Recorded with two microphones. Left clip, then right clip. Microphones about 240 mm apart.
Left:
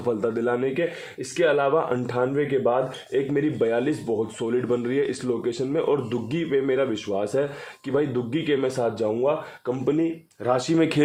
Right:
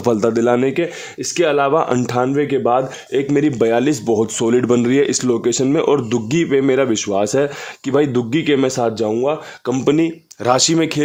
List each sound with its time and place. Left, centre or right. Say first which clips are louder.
0.0 s speech: right 9 dB; right